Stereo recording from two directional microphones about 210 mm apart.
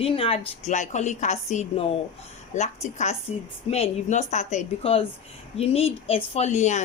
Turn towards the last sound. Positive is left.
turn(degrees=35)  # may be behind; listen again after turning